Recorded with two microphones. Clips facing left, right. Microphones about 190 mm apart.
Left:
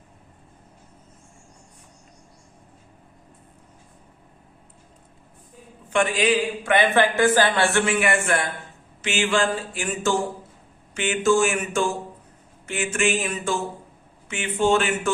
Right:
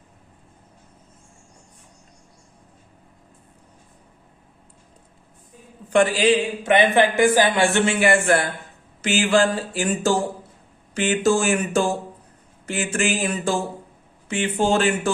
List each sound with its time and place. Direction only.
5.9 s a man's voice: 35° right (ahead or behind)